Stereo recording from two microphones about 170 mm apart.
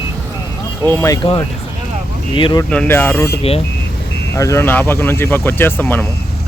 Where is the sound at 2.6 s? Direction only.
10° left (ahead or behind).